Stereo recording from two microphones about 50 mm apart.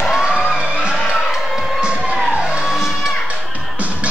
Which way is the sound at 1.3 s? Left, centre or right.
Centre.